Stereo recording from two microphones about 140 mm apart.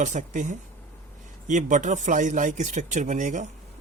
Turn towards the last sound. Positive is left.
turn(degrees=-60)  # may be behind; listen again after turning